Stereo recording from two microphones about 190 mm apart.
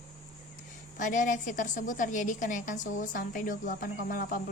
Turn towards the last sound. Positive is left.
turn(degrees=45)  # may be behind; listen again after turning